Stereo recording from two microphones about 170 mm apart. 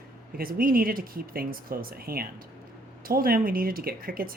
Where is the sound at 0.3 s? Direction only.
60° right (ahead or behind).